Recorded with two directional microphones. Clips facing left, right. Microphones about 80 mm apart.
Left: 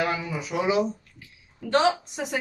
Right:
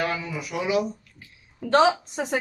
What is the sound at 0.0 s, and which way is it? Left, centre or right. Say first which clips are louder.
Speech: left 1 dB; centre.